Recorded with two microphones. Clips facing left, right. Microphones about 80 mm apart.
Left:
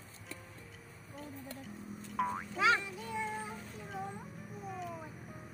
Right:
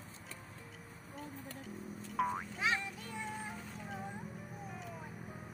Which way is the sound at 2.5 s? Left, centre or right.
Left.